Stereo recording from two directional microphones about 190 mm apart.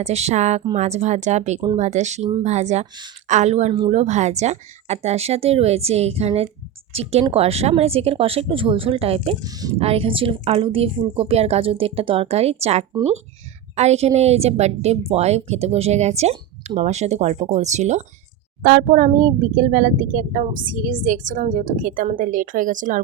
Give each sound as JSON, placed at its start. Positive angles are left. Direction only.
{"t": 0.0, "sound": "a woman's voice", "side_deg": -35}
{"t": 9.4, "sound": "speech", "side_deg": -20}
{"t": 9.7, "sound": "a woman's voice", "side_deg": -30}